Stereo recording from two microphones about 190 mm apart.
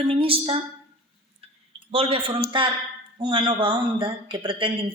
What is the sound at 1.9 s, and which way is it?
Speech, 30° right (ahead or behind).